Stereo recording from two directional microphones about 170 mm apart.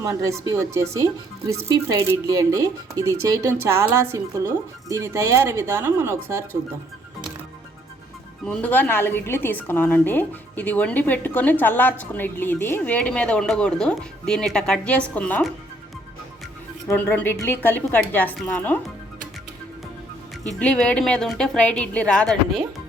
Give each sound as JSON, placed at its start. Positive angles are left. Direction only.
{"t": 0.0, "sound": "speech", "side_deg": -15}
{"t": 8.4, "sound": "a woman's voice", "side_deg": 10}
{"t": 16.9, "sound": "a woman's voice", "side_deg": 10}
{"t": 20.6, "sound": "speech", "side_deg": 5}